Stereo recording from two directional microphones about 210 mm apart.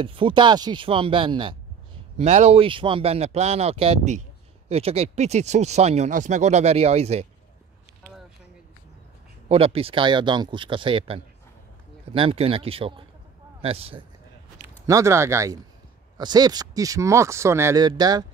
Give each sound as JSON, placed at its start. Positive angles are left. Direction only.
{"t": 0.0, "sound": "speech", "side_deg": -25}
{"t": 9.5, "sound": "speech", "side_deg": -25}
{"t": 14.9, "sound": "speech", "side_deg": -15}